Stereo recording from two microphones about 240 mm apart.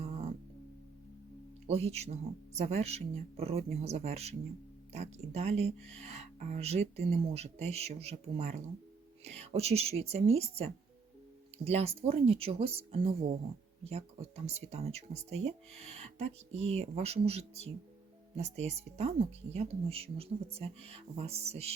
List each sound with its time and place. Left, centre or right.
0.0 s music: right
1.6 s speech: right